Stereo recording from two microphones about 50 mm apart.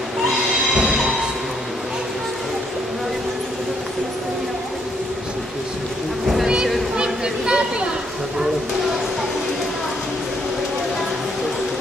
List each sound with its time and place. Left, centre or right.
0.7 s train: centre
6.2 s boat: centre
7.0 s a sound: centre